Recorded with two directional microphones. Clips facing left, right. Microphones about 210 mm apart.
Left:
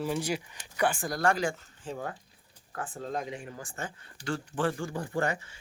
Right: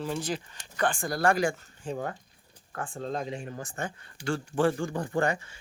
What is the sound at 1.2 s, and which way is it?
Speech, 10° right (ahead or behind).